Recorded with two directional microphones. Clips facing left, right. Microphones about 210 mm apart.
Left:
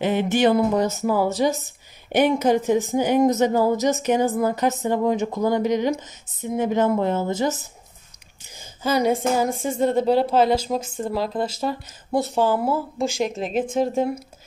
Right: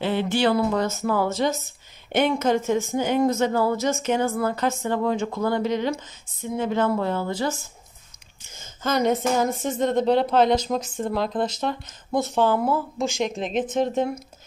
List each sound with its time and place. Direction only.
0.0 s speech: 15° left (ahead or behind)
8.5 s a woman's voice: 10° left (ahead or behind)